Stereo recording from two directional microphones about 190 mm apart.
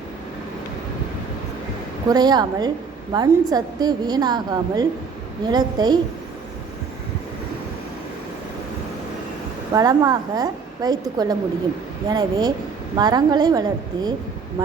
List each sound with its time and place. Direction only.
2.0 s a woman's voice: 20° right (ahead or behind)
9.7 s a woman's voice: 20° right (ahead or behind)